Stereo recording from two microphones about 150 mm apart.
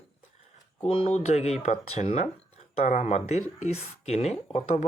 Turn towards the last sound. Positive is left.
turn(degrees=45)  # may be behind; listen again after turning